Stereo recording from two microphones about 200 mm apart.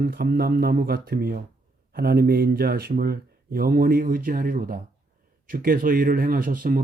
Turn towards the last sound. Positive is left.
turn(degrees=-45)  # may be behind; listen again after turning